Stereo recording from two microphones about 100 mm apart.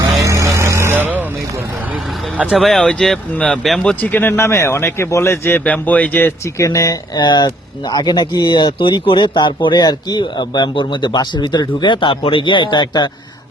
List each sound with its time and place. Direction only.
0.2 s vehicle: 30° right (ahead or behind)
2.4 s speech: 5° right (ahead or behind)
4.0 s a man's voice: 20° left (ahead or behind)
6.6 s speech: 30° left (ahead or behind)
7.2 s speech: 45° left (ahead or behind)